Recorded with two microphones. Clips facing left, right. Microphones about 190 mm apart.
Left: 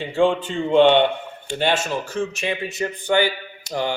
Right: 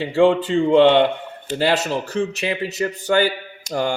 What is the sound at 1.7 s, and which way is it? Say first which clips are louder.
Speech: right 3 dB; 35° right (ahead or behind).